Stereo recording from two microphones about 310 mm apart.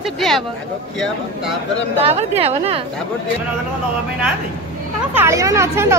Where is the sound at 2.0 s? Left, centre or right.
Centre.